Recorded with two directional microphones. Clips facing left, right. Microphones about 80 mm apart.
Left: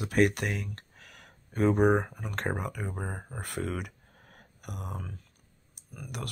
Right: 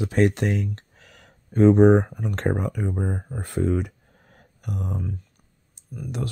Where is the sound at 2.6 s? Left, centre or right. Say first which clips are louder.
Right 8 dB; right.